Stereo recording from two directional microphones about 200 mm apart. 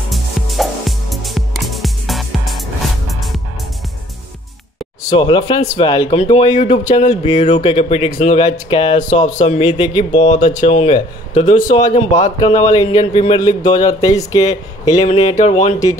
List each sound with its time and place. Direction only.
0.1 s music: centre (ahead or behind)
5.1 s speech: 20° left (ahead or behind)
9.4 s speech: 35° left (ahead or behind)
12.6 s speech: 20° left (ahead or behind)
12.9 s speech: 30° left (ahead or behind)
13.6 s speech: 35° left (ahead or behind)
14.0 s speech: 15° left (ahead or behind)
14.9 s speech: 30° left (ahead or behind)